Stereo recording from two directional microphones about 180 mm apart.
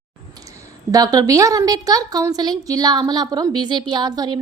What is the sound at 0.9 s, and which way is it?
A woman's voice, 20° right (ahead or behind).